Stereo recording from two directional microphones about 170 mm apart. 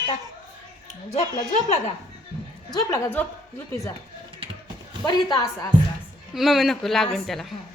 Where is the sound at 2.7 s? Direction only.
15° left (ahead or behind).